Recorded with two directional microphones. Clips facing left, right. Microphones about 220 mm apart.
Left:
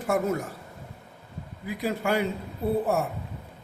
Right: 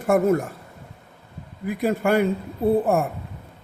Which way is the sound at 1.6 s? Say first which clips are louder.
Right 6 dB; 55° right (ahead or behind).